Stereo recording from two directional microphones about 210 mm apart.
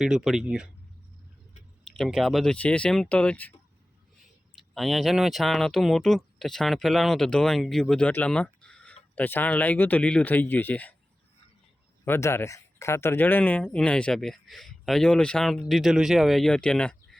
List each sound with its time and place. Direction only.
0.0 s speech: centre (ahead or behind)
1.8 s speech: centre (ahead or behind)
4.5 s speech: centre (ahead or behind)
12.0 s speech: 10° left (ahead or behind)